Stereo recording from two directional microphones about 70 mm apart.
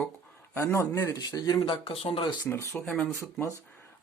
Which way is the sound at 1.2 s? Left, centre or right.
Left.